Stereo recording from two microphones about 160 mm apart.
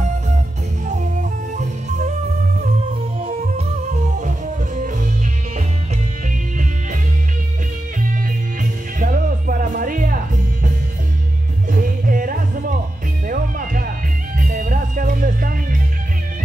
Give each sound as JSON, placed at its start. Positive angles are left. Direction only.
{"t": 3.2, "sound": "music", "side_deg": -35}
{"t": 8.5, "sound": "music", "side_deg": -60}
{"t": 11.7, "sound": "music", "side_deg": -60}